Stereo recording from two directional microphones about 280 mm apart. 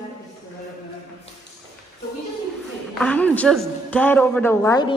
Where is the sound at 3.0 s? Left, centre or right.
Centre.